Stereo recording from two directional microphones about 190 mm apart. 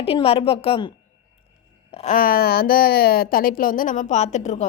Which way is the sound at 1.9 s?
40° left (ahead or behind).